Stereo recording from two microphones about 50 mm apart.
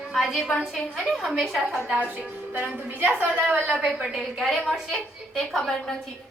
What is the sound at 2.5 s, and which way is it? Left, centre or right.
Speech, right.